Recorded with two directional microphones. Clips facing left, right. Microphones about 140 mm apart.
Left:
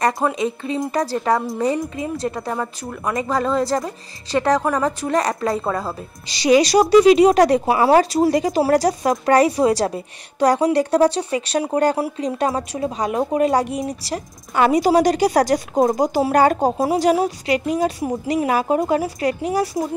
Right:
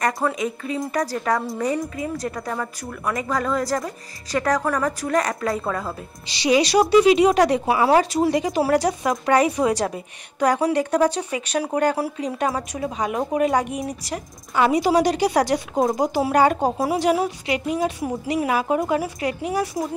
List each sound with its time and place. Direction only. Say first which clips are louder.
0.4 s a woman's voice: left 3 dB; 30° left (ahead or behind); by 7.6 s 45° left (ahead or behind)
7.6 s a woman's voice: left 3 dB; 30° left (ahead or behind)
14.5 s speech: left 3 dB; 50° left (ahead or behind)
16.7 s a woman's voice: left 3 dB; 25° left (ahead or behind)
17.0 s a woman's voice: left 3 dB; 40° left (ahead or behind)
18.0 s a woman's voice: left 3 dB; 25° left (ahead or behind)
18.5 s a woman's voice: left 3 dB; 40° left (ahead or behind)